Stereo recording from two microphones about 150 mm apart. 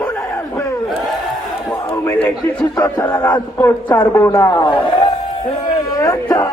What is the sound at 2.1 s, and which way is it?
A man's voice, 10° left (ahead or behind).